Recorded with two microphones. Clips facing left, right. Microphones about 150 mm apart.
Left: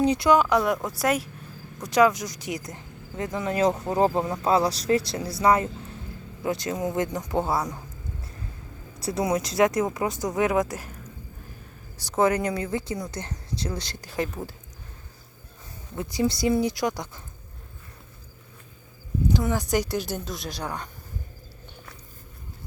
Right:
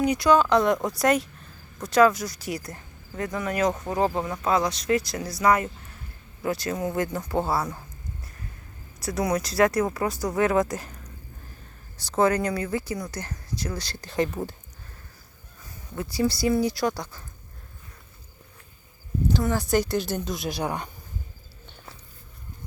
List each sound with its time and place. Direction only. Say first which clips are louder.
0.0 s speech: even; 25° left (ahead or behind)
0.3 s speech: right 1 dB; 10° left (ahead or behind)
9.0 s speech: left 1 dB; 25° left (ahead or behind); by 14.3 s 10° left (ahead or behind)
16.0 s speech: even; 20° left (ahead or behind)
19.3 s speech: right 1 dB; 15° left (ahead or behind)
20.5 s speech: right 5 dB; 10° right (ahead or behind)